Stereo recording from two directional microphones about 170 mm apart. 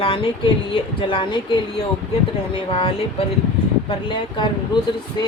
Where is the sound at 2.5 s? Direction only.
30° left (ahead or behind).